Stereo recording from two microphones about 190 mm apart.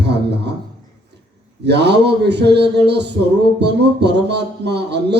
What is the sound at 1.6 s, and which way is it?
Speech, 60° right (ahead or behind).